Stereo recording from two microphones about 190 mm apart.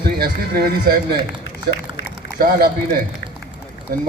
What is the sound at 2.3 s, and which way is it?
Speech, 50° right (ahead or behind).